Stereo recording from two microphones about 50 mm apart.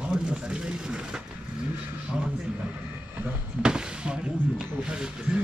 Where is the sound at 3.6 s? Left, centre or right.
Centre.